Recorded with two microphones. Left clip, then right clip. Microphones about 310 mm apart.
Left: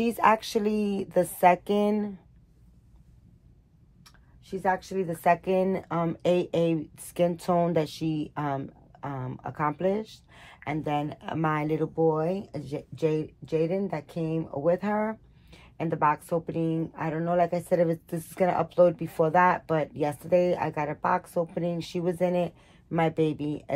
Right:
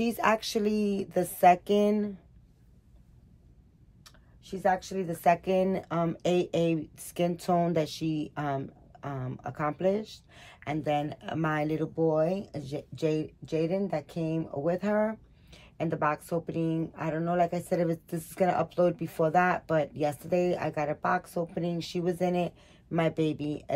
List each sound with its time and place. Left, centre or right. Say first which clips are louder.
0.0 s speech: left 4 dB; centre
4.0 s speech: right 2 dB; centre